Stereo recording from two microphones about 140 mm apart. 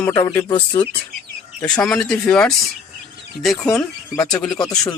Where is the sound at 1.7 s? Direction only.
5° left (ahead or behind).